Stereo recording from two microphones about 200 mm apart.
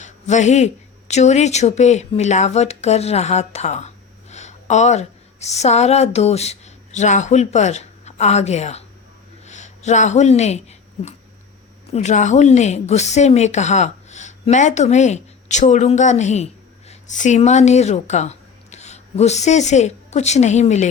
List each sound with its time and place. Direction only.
0.0 s a woman's voice: 35° left (ahead or behind)